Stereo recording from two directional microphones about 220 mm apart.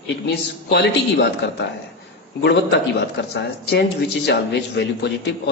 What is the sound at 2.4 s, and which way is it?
Speech, 50° left (ahead or behind).